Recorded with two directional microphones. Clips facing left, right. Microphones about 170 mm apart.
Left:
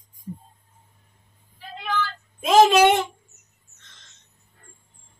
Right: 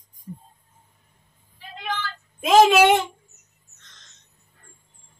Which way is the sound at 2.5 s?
5° right (ahead or behind).